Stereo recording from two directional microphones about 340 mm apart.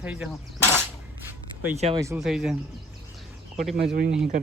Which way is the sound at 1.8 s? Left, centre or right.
Centre.